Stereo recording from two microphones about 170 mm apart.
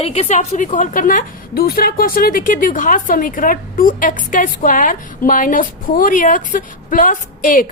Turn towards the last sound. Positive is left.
turn(degrees=50)  # may be behind; listen again after turning